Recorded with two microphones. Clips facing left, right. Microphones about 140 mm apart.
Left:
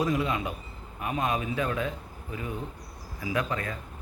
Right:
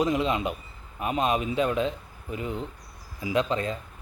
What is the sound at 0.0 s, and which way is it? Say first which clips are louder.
Speech: right 3 dB; 20° right (ahead or behind).